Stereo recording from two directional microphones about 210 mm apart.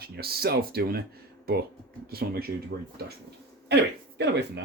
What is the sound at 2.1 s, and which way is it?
Speech, 45° right (ahead or behind).